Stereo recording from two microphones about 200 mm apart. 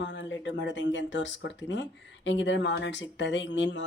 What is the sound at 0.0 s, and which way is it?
Speech, 65° left (ahead or behind).